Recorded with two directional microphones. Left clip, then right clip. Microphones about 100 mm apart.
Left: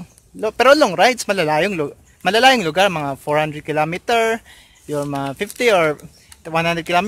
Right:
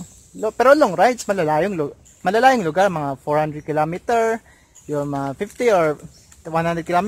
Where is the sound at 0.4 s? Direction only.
10° left (ahead or behind).